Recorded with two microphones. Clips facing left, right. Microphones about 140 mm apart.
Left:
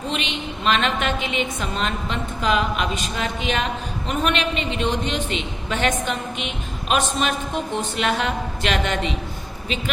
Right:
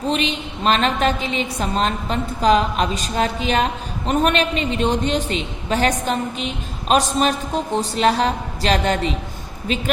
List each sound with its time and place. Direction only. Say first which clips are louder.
0.1 s a woman's voice: right 6 dB; 40° right (ahead or behind)